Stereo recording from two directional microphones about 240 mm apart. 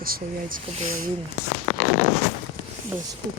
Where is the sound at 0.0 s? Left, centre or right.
Right.